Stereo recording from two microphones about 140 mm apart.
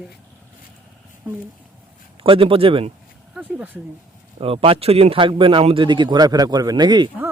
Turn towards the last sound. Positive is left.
turn(degrees=-30)  # may be behind; listen again after turning